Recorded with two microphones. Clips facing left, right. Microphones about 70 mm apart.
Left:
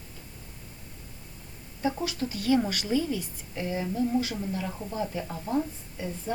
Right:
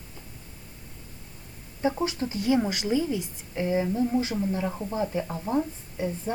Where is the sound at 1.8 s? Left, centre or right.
Right.